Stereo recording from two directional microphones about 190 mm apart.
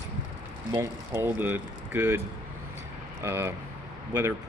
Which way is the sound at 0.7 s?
15° right (ahead or behind).